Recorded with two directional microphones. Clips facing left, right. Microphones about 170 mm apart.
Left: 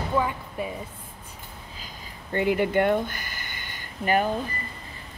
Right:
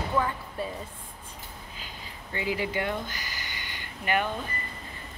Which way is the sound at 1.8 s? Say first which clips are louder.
Left 1 dB; 50° left (ahead or behind).